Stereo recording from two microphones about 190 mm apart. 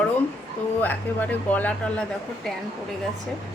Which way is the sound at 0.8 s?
10° left (ahead or behind).